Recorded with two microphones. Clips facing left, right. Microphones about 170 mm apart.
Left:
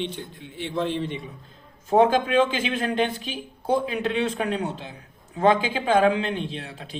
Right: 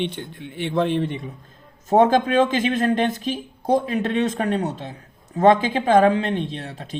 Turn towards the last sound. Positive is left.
turn(degrees=-40)  # may be behind; listen again after turning